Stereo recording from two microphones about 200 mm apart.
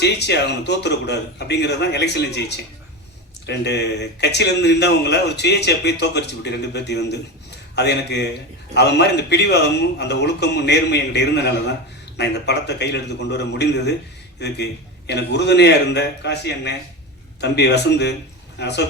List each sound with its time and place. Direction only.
0.0 s a man's voice: 60° left (ahead or behind)